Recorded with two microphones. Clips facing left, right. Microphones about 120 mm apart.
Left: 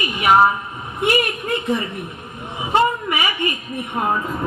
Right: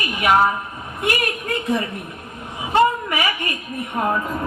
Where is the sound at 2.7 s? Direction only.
20° left (ahead or behind).